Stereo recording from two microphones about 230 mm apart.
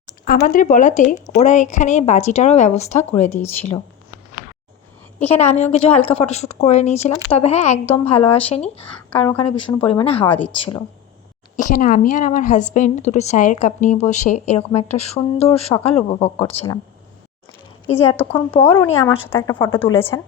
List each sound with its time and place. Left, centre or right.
0.3 s speech: left
5.3 s speech: left
10.2 s speech: centre
10.6 s speech: centre
11.5 s speech: left
17.9 s speech: centre
18.3 s speech: left
18.7 s speech: centre